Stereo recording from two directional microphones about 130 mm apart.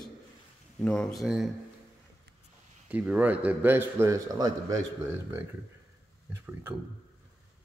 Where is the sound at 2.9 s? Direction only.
10° right (ahead or behind).